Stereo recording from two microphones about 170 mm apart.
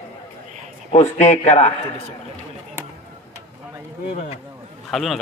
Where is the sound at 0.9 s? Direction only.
40° left (ahead or behind).